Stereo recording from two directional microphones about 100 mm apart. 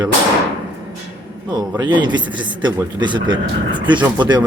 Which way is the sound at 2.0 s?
50° right (ahead or behind).